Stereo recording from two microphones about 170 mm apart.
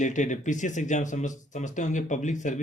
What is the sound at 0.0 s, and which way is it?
Speech, 45° left (ahead or behind).